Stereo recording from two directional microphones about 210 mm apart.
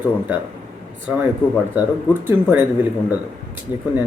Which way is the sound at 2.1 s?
10° right (ahead or behind).